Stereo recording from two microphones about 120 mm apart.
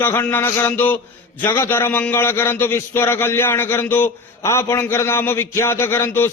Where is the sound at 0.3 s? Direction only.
15° left (ahead or behind).